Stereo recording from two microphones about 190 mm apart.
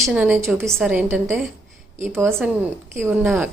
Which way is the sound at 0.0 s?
5° right (ahead or behind).